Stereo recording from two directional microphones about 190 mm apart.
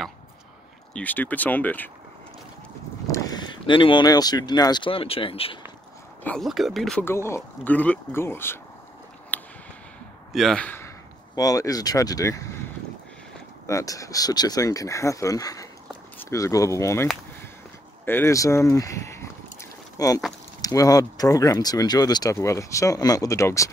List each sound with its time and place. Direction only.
0.9 s speech: 10° left (ahead or behind)
3.1 s speech: 20° left (ahead or behind)
6.2 s speech: centre (ahead or behind)
9.3 s a sound: 10° left (ahead or behind)
10.3 s speech: centre (ahead or behind)
13.7 s speech: 15° left (ahead or behind)
18.0 s a sound: 10° left (ahead or behind)
20.6 s speech: 20° left (ahead or behind)